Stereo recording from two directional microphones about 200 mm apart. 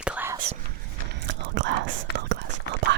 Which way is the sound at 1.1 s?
60° right (ahead or behind).